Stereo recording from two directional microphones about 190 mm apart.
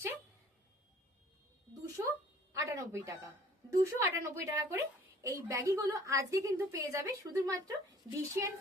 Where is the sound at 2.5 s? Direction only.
15° right (ahead or behind).